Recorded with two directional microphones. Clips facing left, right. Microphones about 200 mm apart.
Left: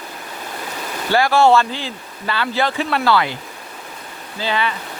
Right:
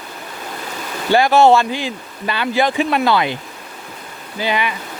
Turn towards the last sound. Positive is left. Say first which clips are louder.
# right 1 dB
turn(degrees=-15)  # may be behind; listen again after turning